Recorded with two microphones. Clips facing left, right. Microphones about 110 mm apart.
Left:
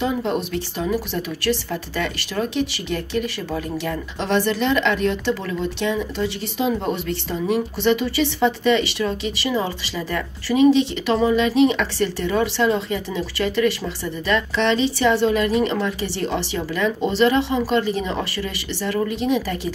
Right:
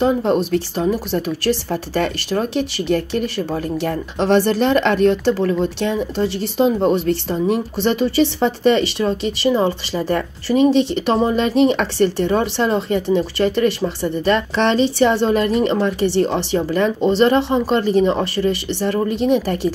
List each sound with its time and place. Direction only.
0.0 s speech: 40° right (ahead or behind)
18.9 s speech: 40° right (ahead or behind)